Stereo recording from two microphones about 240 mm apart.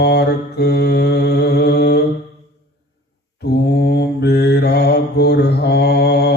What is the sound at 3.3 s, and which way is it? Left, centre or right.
Mantra, left.